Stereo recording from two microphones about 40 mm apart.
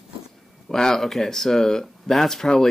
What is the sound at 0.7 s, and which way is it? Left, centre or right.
Speech, centre.